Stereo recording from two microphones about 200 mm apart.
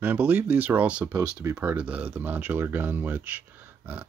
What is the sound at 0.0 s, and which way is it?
Speech, 10° right (ahead or behind).